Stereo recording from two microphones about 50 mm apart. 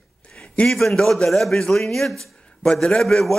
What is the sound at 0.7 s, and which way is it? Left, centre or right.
A man's voice, centre.